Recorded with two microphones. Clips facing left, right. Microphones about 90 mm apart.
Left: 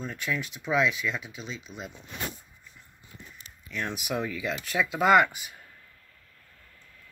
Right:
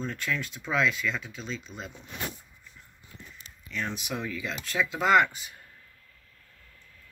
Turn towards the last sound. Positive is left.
turn(degrees=5)  # may be behind; listen again after turning